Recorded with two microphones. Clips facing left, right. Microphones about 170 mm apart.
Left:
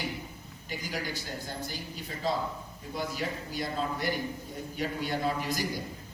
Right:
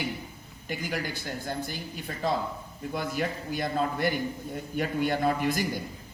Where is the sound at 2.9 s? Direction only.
55° right (ahead or behind).